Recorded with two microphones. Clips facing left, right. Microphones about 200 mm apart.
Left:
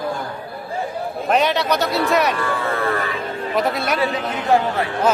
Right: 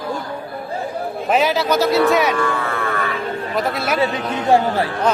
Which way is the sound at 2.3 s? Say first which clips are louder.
Right 1 dB; 35° left (ahead or behind).